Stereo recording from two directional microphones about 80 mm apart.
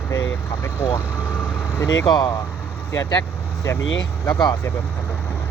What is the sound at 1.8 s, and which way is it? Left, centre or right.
Speech, left.